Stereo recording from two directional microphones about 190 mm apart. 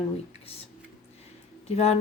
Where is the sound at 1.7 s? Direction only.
35° left (ahead or behind).